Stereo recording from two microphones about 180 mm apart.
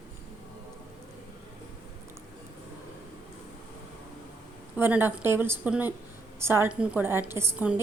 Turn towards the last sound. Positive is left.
turn(degrees=-10)  # may be behind; listen again after turning